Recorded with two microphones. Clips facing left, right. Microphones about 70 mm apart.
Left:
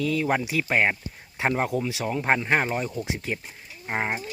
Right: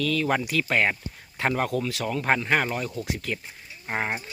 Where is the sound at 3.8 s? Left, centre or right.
Centre.